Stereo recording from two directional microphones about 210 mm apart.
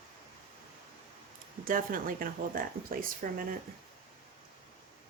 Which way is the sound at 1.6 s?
40° right (ahead or behind).